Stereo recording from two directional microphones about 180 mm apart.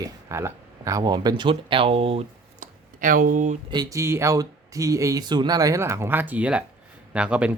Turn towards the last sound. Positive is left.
turn(degrees=-5)  # may be behind; listen again after turning